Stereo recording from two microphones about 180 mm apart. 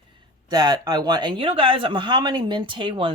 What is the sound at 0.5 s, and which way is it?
Speech, 25° right (ahead or behind).